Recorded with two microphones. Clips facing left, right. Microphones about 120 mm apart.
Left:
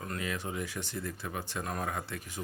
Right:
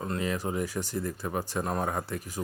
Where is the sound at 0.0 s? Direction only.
30° right (ahead or behind).